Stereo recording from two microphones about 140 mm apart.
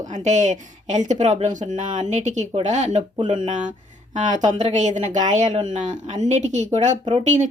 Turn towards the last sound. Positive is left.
turn(degrees=-55)  # may be behind; listen again after turning